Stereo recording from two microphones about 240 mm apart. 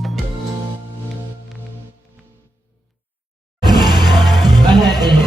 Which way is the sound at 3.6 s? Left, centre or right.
Centre.